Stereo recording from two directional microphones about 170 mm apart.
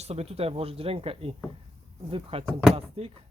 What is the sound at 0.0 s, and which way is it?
Speech, 40° right (ahead or behind).